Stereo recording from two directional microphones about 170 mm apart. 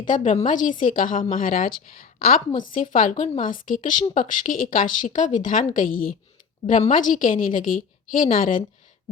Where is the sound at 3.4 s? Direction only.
50° left (ahead or behind).